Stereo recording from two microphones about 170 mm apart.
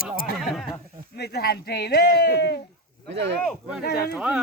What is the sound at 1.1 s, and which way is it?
Speech, 70° left (ahead or behind).